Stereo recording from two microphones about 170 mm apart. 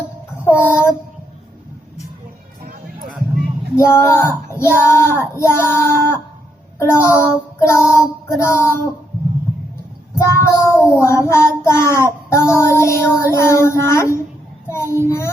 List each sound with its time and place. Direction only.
0.4 s child singing: 15° left (ahead or behind)
3.8 s child singing: 15° left (ahead or behind)
10.2 s child singing: 15° left (ahead or behind)